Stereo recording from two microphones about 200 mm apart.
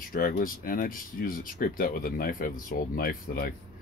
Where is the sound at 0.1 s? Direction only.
45° left (ahead or behind).